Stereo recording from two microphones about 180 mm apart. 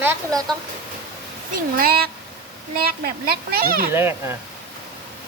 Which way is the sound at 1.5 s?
55° right (ahead or behind).